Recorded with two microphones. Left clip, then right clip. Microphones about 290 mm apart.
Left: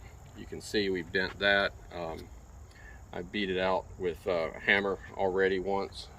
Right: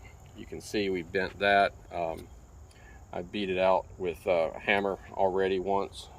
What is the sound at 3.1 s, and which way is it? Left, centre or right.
Speech, centre.